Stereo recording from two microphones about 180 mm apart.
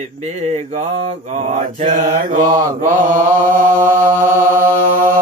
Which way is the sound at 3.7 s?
15° right (ahead or behind).